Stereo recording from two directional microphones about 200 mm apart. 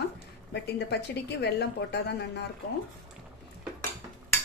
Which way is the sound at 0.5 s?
55° left (ahead or behind).